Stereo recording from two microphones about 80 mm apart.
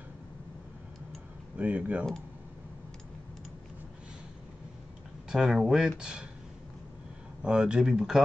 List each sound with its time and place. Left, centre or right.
1.6 s speech: centre
5.3 s speech: centre
7.4 s speech: centre